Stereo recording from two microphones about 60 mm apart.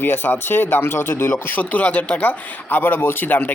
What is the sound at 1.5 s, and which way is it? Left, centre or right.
Speech, left.